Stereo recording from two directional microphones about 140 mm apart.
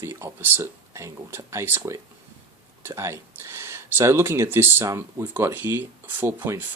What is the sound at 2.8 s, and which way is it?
Speech, 20° right (ahead or behind).